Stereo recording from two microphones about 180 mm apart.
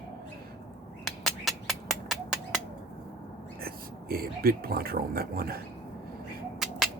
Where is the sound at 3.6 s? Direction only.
55° right (ahead or behind).